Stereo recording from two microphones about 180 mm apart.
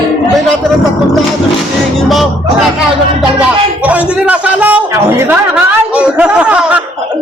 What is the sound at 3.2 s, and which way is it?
Music, 5° right (ahead or behind).